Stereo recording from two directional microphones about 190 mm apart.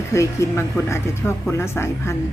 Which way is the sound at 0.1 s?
15° left (ahead or behind).